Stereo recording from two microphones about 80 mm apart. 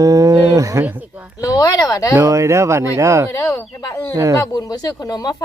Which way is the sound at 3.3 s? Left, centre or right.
Left.